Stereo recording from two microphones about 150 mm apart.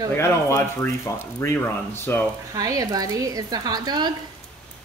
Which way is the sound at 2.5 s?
25° right (ahead or behind).